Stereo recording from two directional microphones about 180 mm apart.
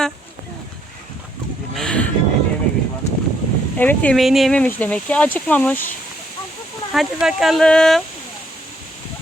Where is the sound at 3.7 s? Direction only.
10° left (ahead or behind).